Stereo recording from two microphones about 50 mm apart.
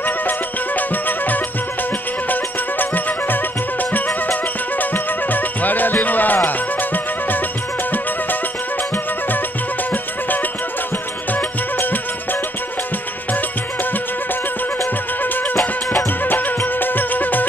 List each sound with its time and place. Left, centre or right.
0.0 s music: left
11.3 s music: left
15.2 s music: left